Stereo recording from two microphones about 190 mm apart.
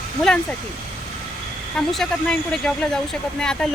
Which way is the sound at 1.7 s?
Centre (ahead or behind).